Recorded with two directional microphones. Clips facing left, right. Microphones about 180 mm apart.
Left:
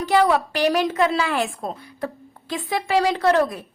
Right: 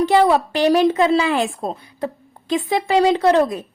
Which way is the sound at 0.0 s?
25° right (ahead or behind).